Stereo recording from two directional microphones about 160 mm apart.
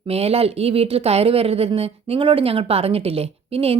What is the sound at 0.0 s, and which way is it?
Speech, 40° right (ahead or behind).